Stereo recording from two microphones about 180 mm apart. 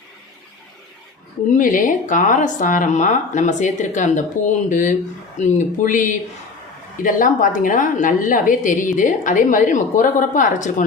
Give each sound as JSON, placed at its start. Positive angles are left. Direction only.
{"t": 1.5, "sound": "a woman's voice", "side_deg": 45}